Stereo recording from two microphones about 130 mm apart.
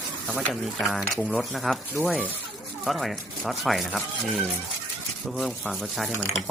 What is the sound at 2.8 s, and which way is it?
Speech, centre (ahead or behind).